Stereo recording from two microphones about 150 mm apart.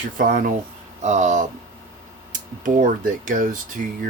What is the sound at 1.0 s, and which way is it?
Speech, 50° right (ahead or behind).